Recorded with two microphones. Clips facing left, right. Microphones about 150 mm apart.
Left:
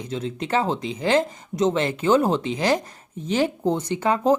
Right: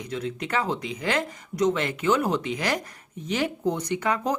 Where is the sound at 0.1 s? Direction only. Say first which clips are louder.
Left 4 dB; 30° left (ahead or behind).